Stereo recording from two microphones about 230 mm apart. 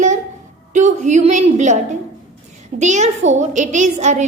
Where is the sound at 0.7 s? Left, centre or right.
Right.